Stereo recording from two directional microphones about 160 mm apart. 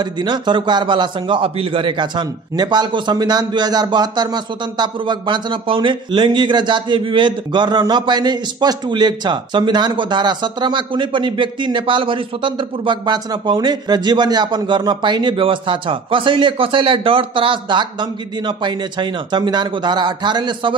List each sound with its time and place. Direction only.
0.0 s a man's voice: 25° right (ahead or behind)